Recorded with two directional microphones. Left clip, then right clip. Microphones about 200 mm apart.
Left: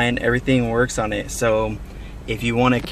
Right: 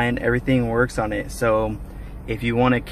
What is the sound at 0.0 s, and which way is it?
Speech, 10° left (ahead or behind).